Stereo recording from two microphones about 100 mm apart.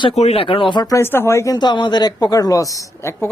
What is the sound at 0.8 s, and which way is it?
Speech, 35° left (ahead or behind).